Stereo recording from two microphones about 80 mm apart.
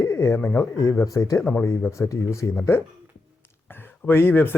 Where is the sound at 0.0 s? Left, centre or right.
Left.